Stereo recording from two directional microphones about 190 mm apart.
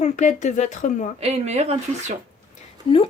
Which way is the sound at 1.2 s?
35° right (ahead or behind).